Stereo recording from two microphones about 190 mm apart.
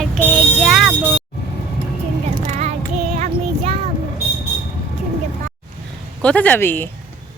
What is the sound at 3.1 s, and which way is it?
Child singing, 40° right (ahead or behind).